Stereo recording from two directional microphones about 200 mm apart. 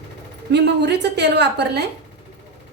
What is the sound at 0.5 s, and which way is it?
Stir, 60° right (ahead or behind).